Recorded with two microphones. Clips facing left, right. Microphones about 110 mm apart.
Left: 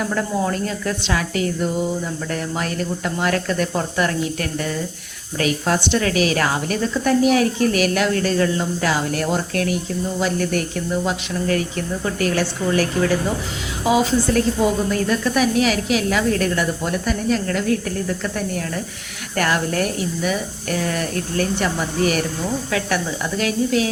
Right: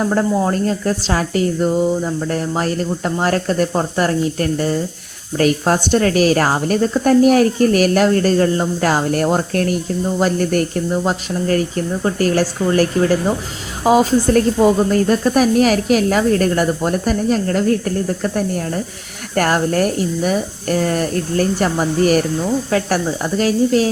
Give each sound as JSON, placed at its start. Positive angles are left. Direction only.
{"t": 0.0, "sound": "a woman's voice", "side_deg": -35}